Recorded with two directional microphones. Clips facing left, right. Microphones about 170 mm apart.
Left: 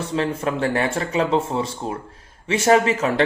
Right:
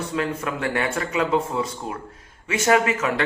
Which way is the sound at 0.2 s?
30° left (ahead or behind).